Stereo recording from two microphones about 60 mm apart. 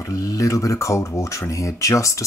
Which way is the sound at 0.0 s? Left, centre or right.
Left.